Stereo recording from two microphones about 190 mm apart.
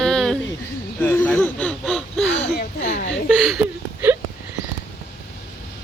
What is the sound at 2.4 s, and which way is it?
Speech, 35° left (ahead or behind).